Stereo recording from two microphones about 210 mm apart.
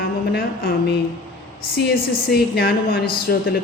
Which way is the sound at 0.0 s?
45° left (ahead or behind).